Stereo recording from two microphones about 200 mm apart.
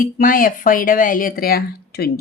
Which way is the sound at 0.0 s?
45° left (ahead or behind).